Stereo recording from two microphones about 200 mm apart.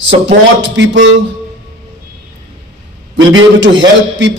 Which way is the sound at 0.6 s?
70° right (ahead or behind).